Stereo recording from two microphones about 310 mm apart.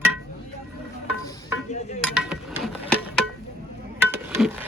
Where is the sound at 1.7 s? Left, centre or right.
Left.